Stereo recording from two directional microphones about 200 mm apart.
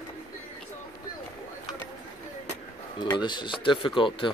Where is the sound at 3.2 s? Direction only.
25° left (ahead or behind).